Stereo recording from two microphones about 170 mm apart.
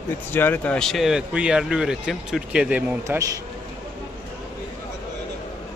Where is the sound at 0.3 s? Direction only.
10° left (ahead or behind); by 3.2 s 10° right (ahead or behind).